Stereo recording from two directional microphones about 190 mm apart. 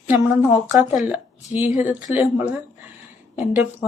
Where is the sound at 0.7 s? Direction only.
5° right (ahead or behind).